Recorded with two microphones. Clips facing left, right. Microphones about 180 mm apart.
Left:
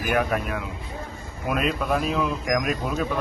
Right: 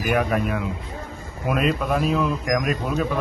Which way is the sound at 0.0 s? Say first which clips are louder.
Right 2 dB; centre (ahead or behind).